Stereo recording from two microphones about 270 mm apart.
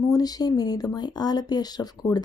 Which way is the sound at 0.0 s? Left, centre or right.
Centre.